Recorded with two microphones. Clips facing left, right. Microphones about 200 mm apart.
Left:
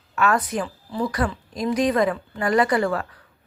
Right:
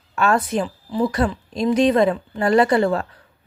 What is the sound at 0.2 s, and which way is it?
A woman's voice, 30° right (ahead or behind).